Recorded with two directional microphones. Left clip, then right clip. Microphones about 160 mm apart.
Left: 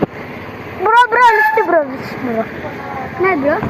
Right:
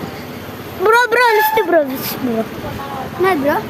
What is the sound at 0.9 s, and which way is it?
Speech, 90° right.